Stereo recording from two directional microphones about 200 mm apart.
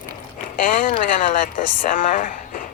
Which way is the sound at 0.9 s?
40° left (ahead or behind).